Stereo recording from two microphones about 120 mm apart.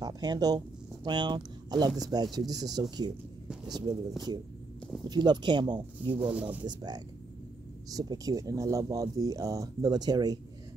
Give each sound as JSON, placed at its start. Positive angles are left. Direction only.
{"t": 0.0, "sound": "speech", "side_deg": -35}
{"t": 3.4, "sound": "speech", "side_deg": -5}
{"t": 4.3, "sound": "speech", "side_deg": -35}